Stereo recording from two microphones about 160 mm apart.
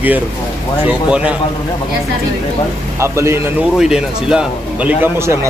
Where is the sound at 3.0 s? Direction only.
15° right (ahead or behind).